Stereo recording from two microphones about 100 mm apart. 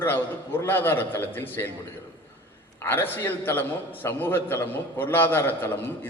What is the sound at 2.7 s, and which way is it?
A man's voice, 20° left (ahead or behind).